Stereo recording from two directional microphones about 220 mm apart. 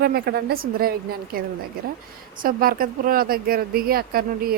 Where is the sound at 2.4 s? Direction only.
40° right (ahead or behind).